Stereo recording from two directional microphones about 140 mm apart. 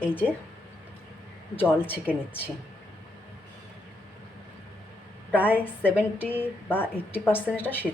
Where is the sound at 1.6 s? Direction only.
15° left (ahead or behind).